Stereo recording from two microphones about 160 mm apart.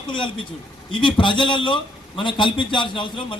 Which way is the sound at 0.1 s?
30° left (ahead or behind).